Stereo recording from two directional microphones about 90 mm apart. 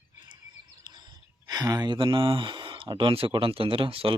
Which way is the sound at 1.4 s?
45° right (ahead or behind).